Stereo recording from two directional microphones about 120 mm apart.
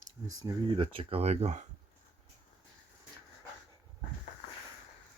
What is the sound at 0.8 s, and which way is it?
Speech, 50° right (ahead or behind).